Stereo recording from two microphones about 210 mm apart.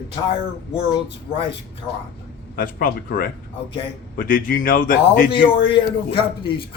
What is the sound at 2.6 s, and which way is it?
Speech, 40° left (ahead or behind).